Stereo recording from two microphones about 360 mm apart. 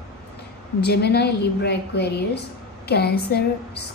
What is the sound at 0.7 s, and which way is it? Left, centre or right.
A woman's voice, left.